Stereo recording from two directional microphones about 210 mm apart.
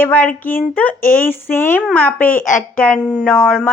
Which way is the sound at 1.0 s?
40° left (ahead or behind).